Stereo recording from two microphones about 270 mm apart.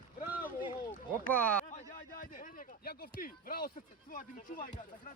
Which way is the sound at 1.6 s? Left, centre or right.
Left.